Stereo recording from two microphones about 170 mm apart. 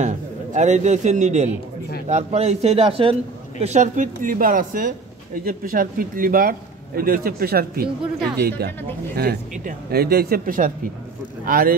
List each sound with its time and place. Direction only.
0.0 s a man's voice: 45° right (ahead or behind)
3.6 s a man's voice: 45° right (ahead or behind)